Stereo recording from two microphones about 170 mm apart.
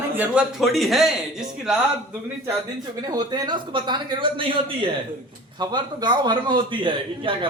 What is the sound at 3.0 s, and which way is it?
A man's voice, 25° right (ahead or behind).